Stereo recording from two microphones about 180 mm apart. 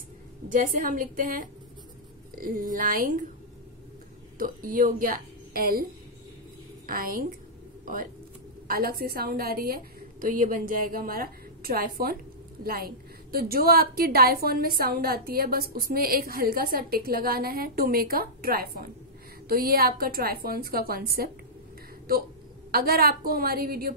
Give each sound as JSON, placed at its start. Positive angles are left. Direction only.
{"t": 0.5, "sound": "a woman's voice", "side_deg": -45}
{"t": 4.4, "sound": "a woman's voice", "side_deg": -50}
{"t": 6.9, "sound": "a woman's voice", "side_deg": -55}
{"t": 22.7, "sound": "a woman's voice", "side_deg": -55}